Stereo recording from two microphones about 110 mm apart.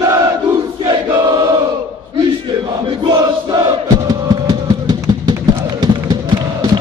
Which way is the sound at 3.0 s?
40° right (ahead or behind).